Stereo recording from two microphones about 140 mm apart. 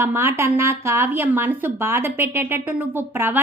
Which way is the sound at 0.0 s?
15° right (ahead or behind).